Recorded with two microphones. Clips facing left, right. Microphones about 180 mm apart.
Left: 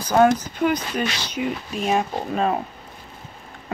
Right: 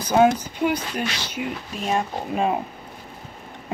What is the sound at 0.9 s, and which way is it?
Speech, 10° right (ahead or behind).